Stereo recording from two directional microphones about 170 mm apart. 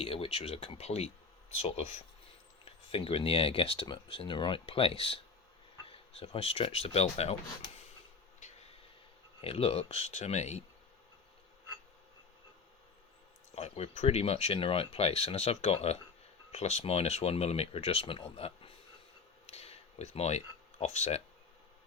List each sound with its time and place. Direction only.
0.0 s speech: 35° left (ahead or behind)
9.4 s speech: 35° left (ahead or behind)
13.6 s speech: 40° left (ahead or behind)
19.5 s a sound: 40° left (ahead or behind)